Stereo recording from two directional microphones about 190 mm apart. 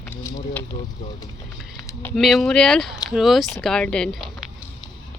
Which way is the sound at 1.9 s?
10° left (ahead or behind).